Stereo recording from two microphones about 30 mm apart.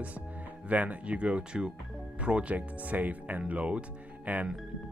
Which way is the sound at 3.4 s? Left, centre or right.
Right.